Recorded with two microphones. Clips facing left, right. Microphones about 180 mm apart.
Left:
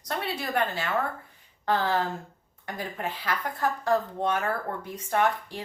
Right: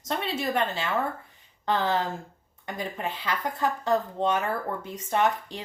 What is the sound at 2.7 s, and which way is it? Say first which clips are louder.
Speech: right 1 dB; 25° right (ahead or behind).